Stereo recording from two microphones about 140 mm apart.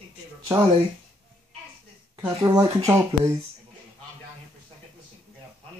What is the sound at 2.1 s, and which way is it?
Speech, 25° right (ahead or behind).